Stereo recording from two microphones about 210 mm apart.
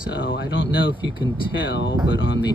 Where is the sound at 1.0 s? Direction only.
25° left (ahead or behind).